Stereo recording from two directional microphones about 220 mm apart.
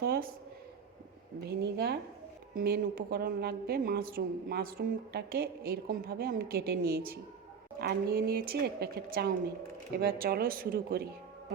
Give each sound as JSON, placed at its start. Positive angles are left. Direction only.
{"t": 0.0, "sound": "speech", "side_deg": -45}
{"t": 1.5, "sound": "a woman's voice", "side_deg": -45}